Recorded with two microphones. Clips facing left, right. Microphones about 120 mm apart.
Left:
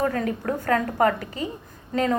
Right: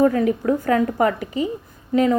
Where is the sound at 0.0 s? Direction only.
20° right (ahead or behind).